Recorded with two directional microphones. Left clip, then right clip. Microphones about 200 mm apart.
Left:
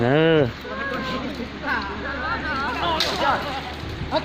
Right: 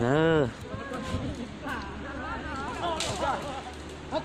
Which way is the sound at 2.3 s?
30° left (ahead or behind).